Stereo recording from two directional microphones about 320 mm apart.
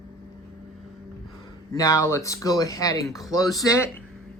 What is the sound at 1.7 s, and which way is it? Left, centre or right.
Speech, centre.